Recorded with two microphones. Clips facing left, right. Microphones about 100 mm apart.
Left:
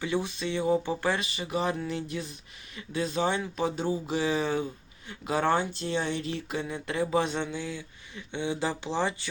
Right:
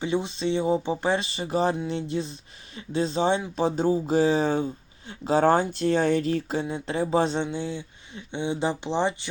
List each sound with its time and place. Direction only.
0.0 s speech: 25° right (ahead or behind)
5.7 s speech: 50° right (ahead or behind); by 9.3 s 25° right (ahead or behind)